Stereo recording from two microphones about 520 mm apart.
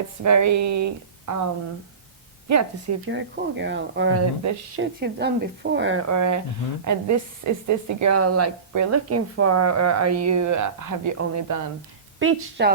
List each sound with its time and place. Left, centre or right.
0.2 s a woman's voice: right
2.5 s a woman's voice: right
3.1 s a woman's voice: right
12.2 s speech: centre